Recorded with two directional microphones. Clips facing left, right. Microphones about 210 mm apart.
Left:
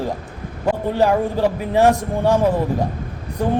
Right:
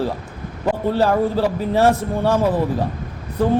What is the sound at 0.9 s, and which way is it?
A man's voice, 15° left (ahead or behind).